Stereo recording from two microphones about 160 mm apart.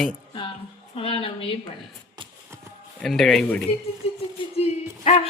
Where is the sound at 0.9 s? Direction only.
35° left (ahead or behind).